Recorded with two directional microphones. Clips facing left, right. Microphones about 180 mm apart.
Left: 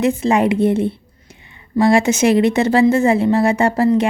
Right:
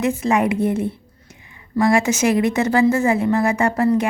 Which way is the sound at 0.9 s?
30° left (ahead or behind).